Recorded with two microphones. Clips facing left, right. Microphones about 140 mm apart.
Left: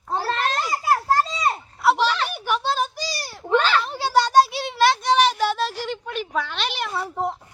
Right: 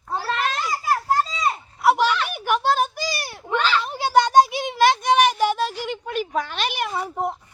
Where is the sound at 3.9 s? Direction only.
15° right (ahead or behind).